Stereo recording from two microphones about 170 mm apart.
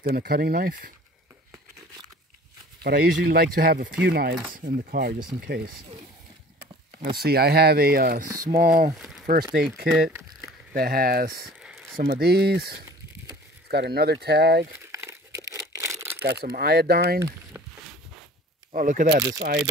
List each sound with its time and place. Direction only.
0.0 s speech: 65° right (ahead or behind)
2.8 s speech: 65° right (ahead or behind)
5.4 s speech: 65° right (ahead or behind)
7.0 s speech: 60° right (ahead or behind)
8.9 s speech: 5° right (ahead or behind)
9.2 s speech: 55° right (ahead or behind)
10.7 s speech: 60° right (ahead or behind)
11.6 s a sound: centre (ahead or behind)
12.1 s speech: 70° right (ahead or behind)
14.9 s crumpling: 20° right (ahead or behind)
16.2 s speech: 70° right (ahead or behind)
18.7 s speech: 50° right (ahead or behind)
19.3 s speech: 70° right (ahead or behind)